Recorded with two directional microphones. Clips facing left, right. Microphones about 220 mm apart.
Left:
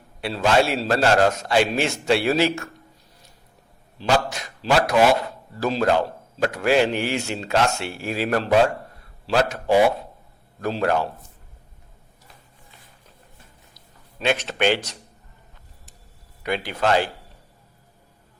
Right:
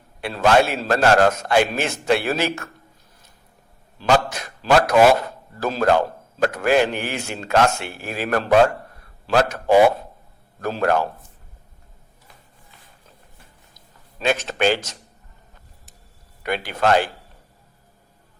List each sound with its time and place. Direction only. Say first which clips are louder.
0.2 s speech: right 2 dB; 45° right (ahead or behind)
4.8 s speech: right 3 dB; 45° right (ahead or behind)
14.3 s speech: right 1 dB; 45° right (ahead or behind)
16.4 s speech: right 2 dB; 50° right (ahead or behind)